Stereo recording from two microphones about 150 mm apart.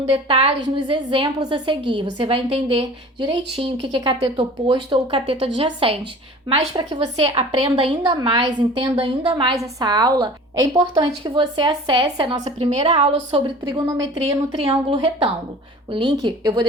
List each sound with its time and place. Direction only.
0.0 s a woman's voice: 40° right (ahead or behind)
7.0 s a woman's voice: 40° right (ahead or behind)
12.5 s a woman's voice: 45° right (ahead or behind); by 16.6 s 25° right (ahead or behind)